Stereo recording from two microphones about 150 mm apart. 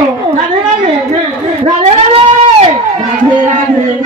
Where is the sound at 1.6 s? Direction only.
40° right (ahead or behind).